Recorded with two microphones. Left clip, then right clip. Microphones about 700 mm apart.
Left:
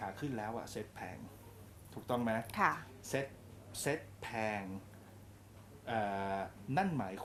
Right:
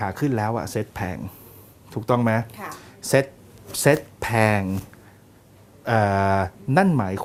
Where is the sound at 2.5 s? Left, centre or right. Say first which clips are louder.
Left 3 dB; left.